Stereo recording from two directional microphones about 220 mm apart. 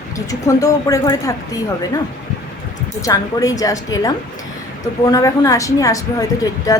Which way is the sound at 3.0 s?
15° left (ahead or behind).